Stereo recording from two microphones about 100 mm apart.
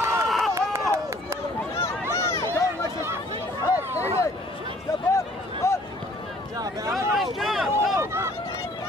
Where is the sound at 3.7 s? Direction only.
20° right (ahead or behind).